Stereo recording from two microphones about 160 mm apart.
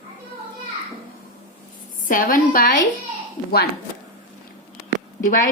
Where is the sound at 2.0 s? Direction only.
60° left (ahead or behind).